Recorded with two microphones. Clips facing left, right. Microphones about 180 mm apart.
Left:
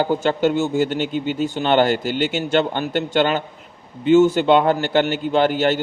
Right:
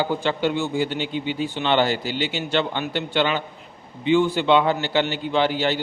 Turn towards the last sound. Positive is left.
turn(degrees=50)  # may be behind; listen again after turning